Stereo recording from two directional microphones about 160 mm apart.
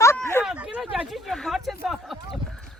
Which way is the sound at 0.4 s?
5° right (ahead or behind).